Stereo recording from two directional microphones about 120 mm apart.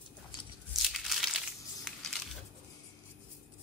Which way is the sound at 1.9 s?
5° right (ahead or behind).